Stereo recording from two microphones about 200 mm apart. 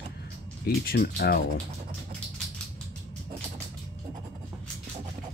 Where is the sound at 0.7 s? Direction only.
50° left (ahead or behind).